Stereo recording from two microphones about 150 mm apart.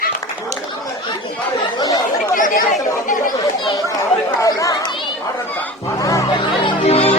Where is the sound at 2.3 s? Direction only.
60° left (ahead or behind).